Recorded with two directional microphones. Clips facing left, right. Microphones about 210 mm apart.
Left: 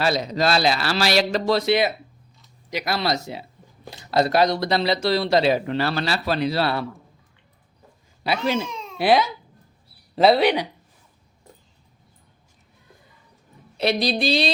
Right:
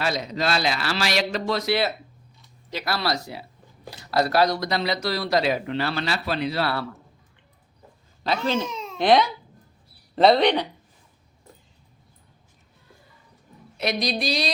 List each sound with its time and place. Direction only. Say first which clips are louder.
0.0 s a man's voice: left 4 dB; 35° left (ahead or behind)
2.6 s speech: left 2 dB; 15° left (ahead or behind); by 6.7 s 30° left (ahead or behind)
8.2 s speech: left 1 dB; 10° left (ahead or behind)
13.7 s speech: left 4 dB; 30° left (ahead or behind)